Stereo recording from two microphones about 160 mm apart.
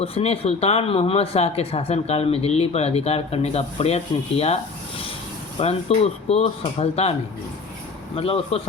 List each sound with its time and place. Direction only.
0.0 s speech: 40° left (ahead or behind)